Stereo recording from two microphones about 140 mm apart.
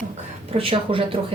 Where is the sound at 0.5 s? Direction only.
45° right (ahead or behind).